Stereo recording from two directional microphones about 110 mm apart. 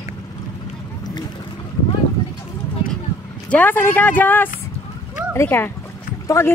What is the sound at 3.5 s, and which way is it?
Speech, 15° left (ahead or behind).